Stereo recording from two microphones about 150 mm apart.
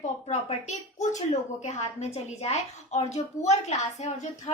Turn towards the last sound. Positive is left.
turn(degrees=50)  # may be behind; listen again after turning